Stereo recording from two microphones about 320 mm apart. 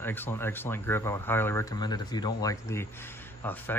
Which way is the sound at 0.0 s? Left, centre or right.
Centre.